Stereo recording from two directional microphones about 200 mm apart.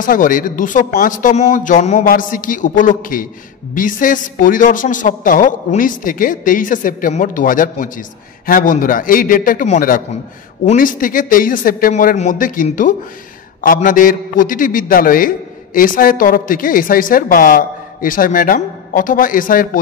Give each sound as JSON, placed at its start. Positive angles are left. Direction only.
{"t": 0.0, "sound": "a woman's voice", "side_deg": 40}